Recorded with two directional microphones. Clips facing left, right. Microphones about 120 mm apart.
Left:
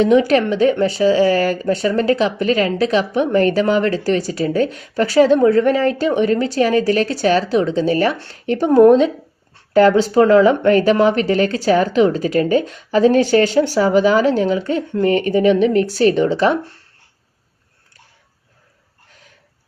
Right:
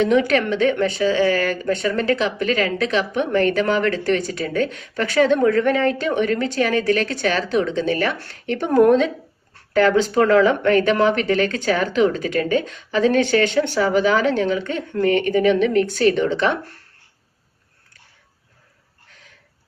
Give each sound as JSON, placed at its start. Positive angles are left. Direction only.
{"t": 0.0, "sound": "speech", "side_deg": 35}